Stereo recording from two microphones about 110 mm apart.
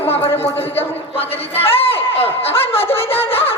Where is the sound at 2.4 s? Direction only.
60° left (ahead or behind).